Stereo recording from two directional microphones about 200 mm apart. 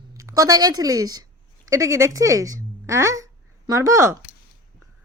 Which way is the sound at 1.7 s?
15° right (ahead or behind).